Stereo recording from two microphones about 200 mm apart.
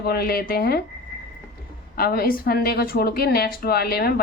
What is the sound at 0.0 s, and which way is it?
Speech, 50° left (ahead or behind).